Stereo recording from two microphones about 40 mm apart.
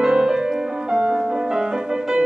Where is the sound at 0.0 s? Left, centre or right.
Centre.